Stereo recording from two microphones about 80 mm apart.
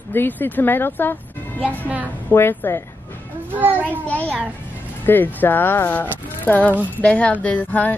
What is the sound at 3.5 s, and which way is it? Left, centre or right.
Speech, right.